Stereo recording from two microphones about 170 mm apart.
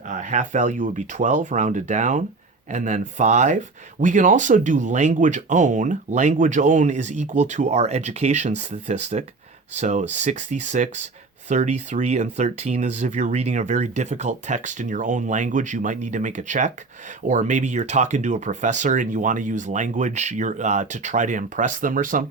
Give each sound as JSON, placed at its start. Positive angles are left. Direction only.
{"t": 0.1, "sound": "speech", "side_deg": -45}